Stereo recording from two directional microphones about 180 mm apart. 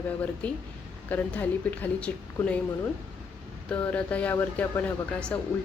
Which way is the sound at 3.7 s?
5° left (ahead or behind).